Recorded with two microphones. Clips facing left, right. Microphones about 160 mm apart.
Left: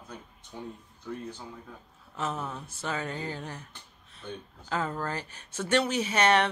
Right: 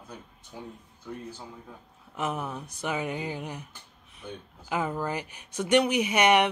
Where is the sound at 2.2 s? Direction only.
15° right (ahead or behind).